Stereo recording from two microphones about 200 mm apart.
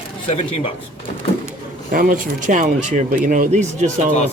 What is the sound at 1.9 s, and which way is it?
Speech, 45° right (ahead or behind).